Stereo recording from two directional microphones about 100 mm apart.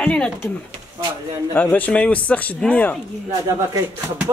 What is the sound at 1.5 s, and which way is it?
Speech, 20° left (ahead or behind).